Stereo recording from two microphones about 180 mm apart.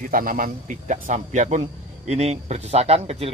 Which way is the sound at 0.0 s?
50° right (ahead or behind).